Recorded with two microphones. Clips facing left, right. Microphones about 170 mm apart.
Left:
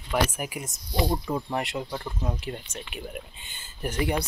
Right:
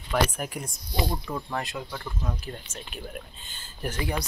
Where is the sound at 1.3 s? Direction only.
20° left (ahead or behind).